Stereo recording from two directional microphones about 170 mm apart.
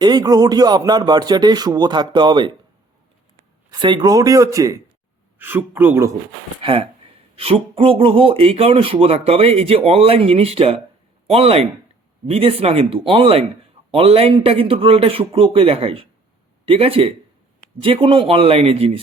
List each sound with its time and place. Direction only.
0.0 s speech: 25° right (ahead or behind)
3.7 s speech: 25° right (ahead or behind)
6.6 s speech: 30° right (ahead or behind)